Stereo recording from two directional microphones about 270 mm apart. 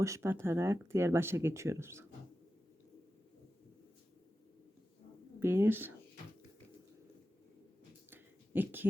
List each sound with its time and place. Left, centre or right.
0.0 s speech: centre
5.4 s speech: centre
8.1 s a sound: centre